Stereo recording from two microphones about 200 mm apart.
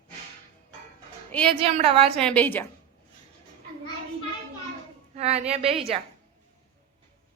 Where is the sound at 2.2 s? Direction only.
5° left (ahead or behind).